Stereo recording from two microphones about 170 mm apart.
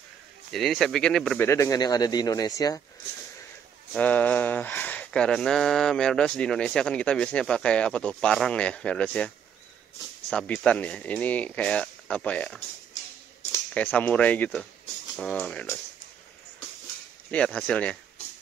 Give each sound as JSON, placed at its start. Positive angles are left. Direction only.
{"t": 0.5, "sound": "speech", "side_deg": 0}
{"t": 1.5, "sound": "speech", "side_deg": 20}
{"t": 3.9, "sound": "speech", "side_deg": 10}
{"t": 10.3, "sound": "speech", "side_deg": 5}
{"t": 17.3, "sound": "speech", "side_deg": 5}